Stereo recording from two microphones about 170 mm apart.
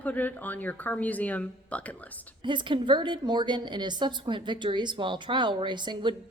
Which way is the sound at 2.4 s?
30° right (ahead or behind).